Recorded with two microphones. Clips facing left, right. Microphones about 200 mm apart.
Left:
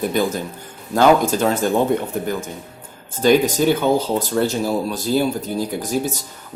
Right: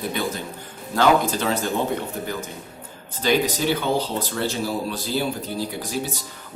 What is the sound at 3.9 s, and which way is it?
Speech, 45° left (ahead or behind).